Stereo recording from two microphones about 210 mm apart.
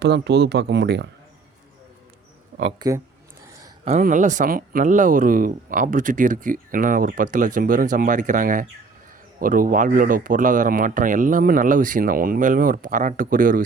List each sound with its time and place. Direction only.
0.0 s speech: 55° right (ahead or behind)
2.7 s speech: 15° right (ahead or behind)
4.0 s speech: 35° right (ahead or behind)